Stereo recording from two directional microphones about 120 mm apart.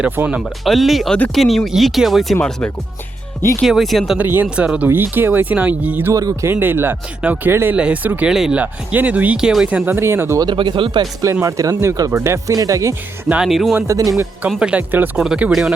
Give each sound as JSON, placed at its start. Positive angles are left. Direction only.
{"t": 0.0, "sound": "speech", "side_deg": -10}
{"t": 0.6, "sound": "speech", "side_deg": 0}
{"t": 2.4, "sound": "speech", "side_deg": 10}
{"t": 3.6, "sound": "speech", "side_deg": 0}
{"t": 4.2, "sound": "speech", "side_deg": -15}
{"t": 6.1, "sound": "speech", "side_deg": -25}
{"t": 10.4, "sound": "speech", "side_deg": -40}
{"t": 11.4, "sound": "speech", "side_deg": -25}
{"t": 13.2, "sound": "speech", "side_deg": -5}
{"t": 13.7, "sound": "speech", "side_deg": -25}
{"t": 14.6, "sound": "speech", "side_deg": -10}